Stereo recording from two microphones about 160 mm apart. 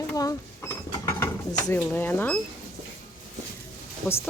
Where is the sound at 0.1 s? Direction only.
20° left (ahead or behind).